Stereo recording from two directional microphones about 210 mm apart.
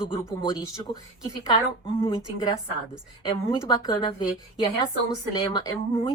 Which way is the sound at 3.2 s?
20° left (ahead or behind).